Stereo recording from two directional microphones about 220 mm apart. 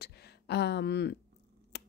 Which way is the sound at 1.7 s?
50° left (ahead or behind).